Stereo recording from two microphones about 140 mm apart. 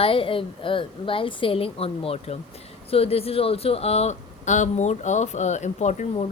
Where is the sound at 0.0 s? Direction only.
40° left (ahead or behind).